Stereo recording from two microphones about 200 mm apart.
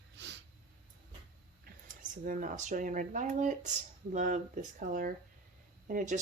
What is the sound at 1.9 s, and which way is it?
Speech, 40° right (ahead or behind).